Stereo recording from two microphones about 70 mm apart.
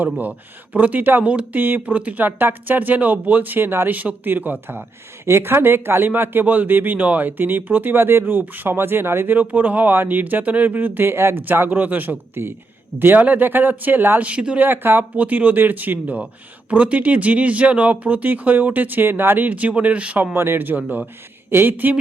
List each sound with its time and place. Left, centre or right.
0.0 s speech: right
14.7 s speech: right
20.3 s speech: right